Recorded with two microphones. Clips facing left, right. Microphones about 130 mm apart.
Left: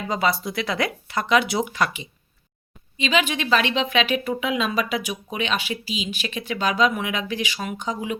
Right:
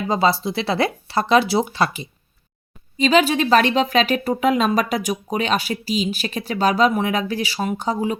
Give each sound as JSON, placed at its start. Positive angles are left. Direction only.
{"t": 0.1, "sound": "speech", "side_deg": -30}